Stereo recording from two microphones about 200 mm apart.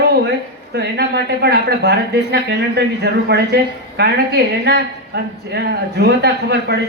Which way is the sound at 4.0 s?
55° right (ahead or behind).